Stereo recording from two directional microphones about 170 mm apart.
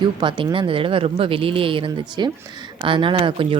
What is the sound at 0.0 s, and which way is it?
Speech, 30° right (ahead or behind).